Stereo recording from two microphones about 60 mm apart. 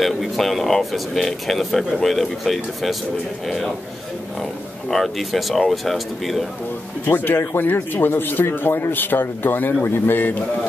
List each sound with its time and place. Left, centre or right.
0.0 s speech: centre
7.1 s speech: left